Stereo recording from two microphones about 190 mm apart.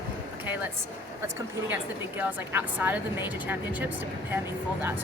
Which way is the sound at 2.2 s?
10° right (ahead or behind).